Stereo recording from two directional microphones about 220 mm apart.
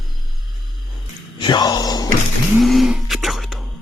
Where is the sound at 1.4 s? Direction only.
20° left (ahead or behind).